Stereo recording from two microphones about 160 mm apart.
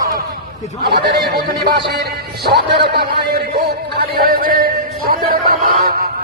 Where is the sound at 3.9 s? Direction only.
70° right (ahead or behind).